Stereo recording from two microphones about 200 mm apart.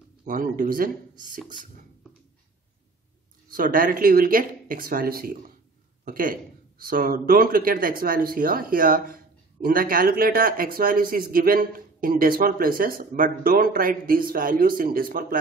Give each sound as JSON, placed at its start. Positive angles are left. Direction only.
{"t": 0.2, "sound": "speech", "side_deg": -45}
{"t": 3.4, "sound": "speech", "side_deg": -45}